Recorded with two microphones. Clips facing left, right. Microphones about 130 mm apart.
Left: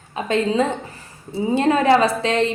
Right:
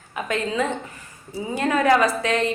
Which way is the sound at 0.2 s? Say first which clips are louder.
Left 5 dB; 25° left (ahead or behind).